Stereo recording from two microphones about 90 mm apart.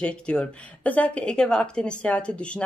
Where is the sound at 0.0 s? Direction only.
10° left (ahead or behind).